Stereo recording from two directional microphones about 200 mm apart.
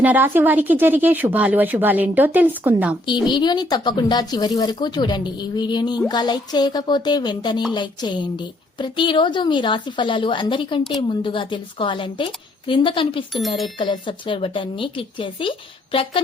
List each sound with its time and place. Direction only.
0.0 s speech: 10° right (ahead or behind)
3.1 s a woman's voice: 20° left (ahead or behind)